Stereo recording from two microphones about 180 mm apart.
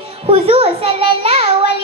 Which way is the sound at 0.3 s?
30° right (ahead or behind).